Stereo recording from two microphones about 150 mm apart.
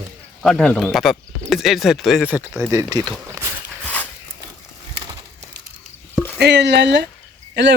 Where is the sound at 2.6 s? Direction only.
20° right (ahead or behind).